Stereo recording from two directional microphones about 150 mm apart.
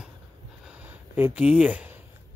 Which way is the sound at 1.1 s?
10° right (ahead or behind).